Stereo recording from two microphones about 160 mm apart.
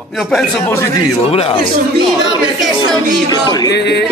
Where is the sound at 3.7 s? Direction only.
90° left.